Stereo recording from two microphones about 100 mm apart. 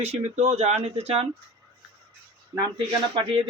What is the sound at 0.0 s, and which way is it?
Speech, 90° right.